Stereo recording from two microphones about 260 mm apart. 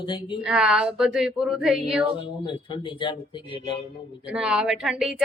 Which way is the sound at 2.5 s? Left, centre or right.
Centre.